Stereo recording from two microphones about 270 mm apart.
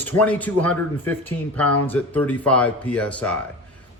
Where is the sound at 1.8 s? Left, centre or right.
Centre.